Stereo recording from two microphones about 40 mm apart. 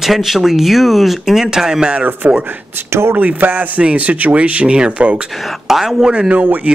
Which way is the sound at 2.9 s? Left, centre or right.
Right.